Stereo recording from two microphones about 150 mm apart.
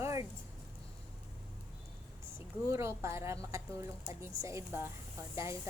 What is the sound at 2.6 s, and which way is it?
A woman's voice, 20° right (ahead or behind).